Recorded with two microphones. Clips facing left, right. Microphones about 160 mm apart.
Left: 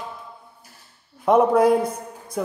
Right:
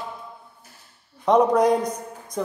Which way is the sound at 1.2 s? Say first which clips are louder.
Left 1 dB; 5° left (ahead or behind).